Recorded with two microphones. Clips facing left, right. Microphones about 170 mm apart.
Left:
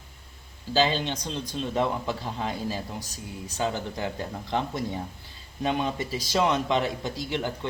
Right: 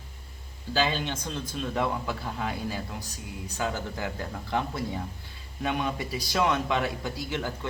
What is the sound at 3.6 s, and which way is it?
Speech, 20° left (ahead or behind).